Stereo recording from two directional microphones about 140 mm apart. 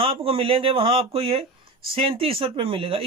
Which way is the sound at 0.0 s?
40° right (ahead or behind).